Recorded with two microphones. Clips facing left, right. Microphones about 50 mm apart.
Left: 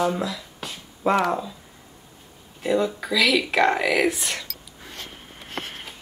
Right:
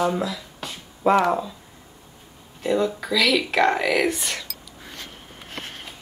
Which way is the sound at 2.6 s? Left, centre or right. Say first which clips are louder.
Even; centre.